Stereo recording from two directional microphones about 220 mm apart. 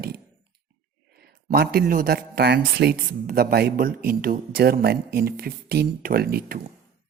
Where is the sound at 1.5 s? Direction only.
45° right (ahead or behind).